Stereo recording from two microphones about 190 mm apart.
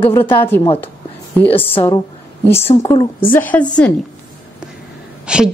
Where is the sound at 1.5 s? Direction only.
30° left (ahead or behind).